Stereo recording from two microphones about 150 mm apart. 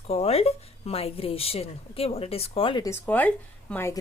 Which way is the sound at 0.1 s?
40° left (ahead or behind).